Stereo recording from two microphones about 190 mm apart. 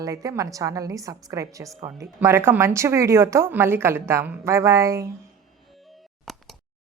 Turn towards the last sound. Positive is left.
turn(degrees=-15)  # may be behind; listen again after turning